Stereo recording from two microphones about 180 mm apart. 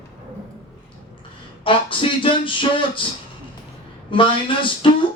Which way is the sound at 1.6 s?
30° left (ahead or behind).